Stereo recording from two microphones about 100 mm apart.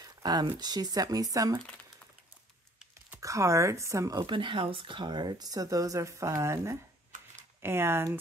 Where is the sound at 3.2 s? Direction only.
30° right (ahead or behind).